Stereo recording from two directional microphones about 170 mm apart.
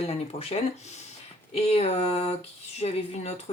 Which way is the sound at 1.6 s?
35° left (ahead or behind).